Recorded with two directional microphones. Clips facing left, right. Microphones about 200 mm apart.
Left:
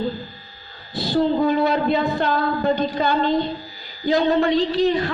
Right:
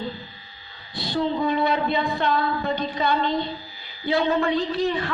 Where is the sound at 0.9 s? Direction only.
35° left (ahead or behind).